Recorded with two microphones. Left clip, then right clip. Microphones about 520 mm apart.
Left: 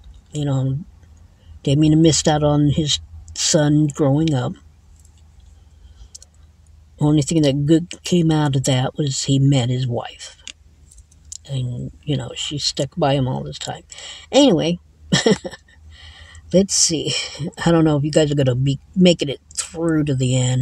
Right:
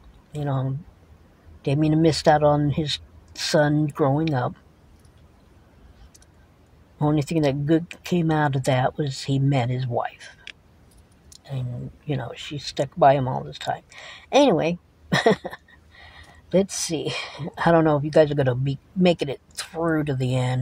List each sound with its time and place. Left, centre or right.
0.3 s speech: right
7.0 s speech: right
11.2 s a sound: right
12.1 s speech: right